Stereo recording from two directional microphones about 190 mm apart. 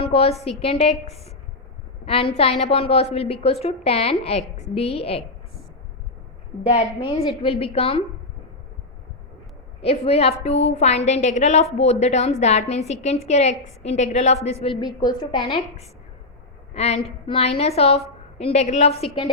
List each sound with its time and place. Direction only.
0.0 s a woman's voice: 30° left (ahead or behind)
7.0 s a woman's voice: 25° left (ahead or behind)
9.8 s a woman's voice: 30° left (ahead or behind)
16.7 s a sound: 35° left (ahead or behind)
17.2 s a woman's voice: 30° left (ahead or behind)